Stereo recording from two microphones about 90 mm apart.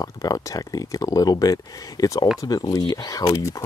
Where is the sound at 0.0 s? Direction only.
40° left (ahead or behind).